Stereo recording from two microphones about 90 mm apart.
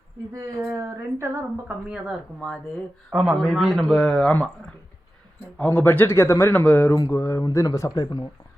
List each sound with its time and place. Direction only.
0.3 s speech: 35° right (ahead or behind)
1.9 s speech: 10° right (ahead or behind); by 4.5 s 15° left (ahead or behind)
5.5 s a man's voice: 20° left (ahead or behind)
6.9 s mantra: 35° left (ahead or behind)